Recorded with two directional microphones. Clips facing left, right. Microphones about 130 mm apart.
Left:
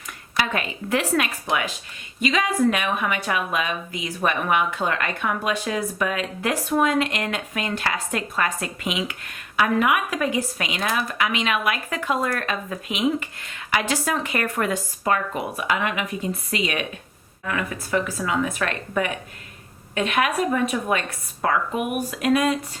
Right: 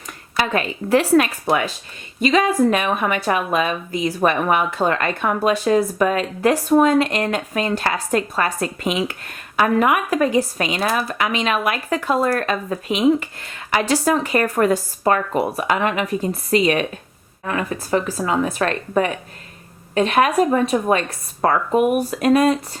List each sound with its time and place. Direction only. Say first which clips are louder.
0.3 s a woman's voice: right 5 dB; 35° right (ahead or behind)